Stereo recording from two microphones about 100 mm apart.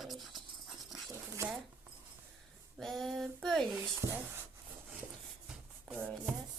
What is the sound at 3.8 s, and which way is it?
Speech, 25° right (ahead or behind).